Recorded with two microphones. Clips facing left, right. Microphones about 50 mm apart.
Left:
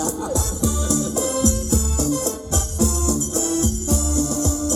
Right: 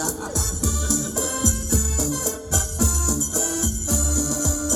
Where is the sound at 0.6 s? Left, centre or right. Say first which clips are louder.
Left 4 dB; centre.